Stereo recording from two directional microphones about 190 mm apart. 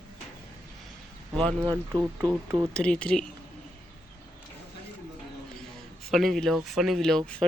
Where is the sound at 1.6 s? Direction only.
20° right (ahead or behind).